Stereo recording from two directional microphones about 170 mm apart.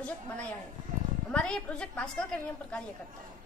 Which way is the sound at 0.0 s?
5° left (ahead or behind).